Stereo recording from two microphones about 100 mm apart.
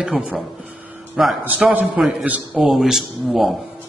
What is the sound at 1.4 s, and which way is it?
A man's voice, 15° right (ahead or behind).